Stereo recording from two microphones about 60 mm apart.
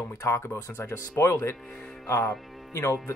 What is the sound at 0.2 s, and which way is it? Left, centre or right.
Speech, left.